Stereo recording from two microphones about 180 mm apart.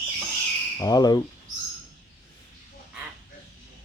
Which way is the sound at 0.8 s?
20° left (ahead or behind).